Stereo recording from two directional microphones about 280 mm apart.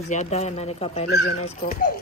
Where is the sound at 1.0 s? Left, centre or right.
Left.